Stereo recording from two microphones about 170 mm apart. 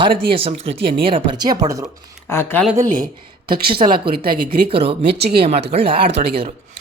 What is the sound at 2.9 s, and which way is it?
Speech, 55° right (ahead or behind).